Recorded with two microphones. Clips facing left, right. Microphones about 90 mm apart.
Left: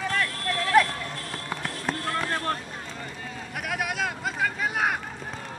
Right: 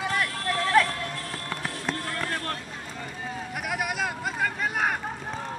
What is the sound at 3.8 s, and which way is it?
Vehicle, centre (ahead or behind).